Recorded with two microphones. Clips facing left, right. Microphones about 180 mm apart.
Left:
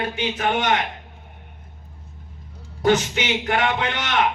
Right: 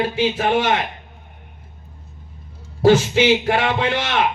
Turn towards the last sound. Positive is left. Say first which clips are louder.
# right 3 dB
turn(degrees=-30)  # may be behind; listen again after turning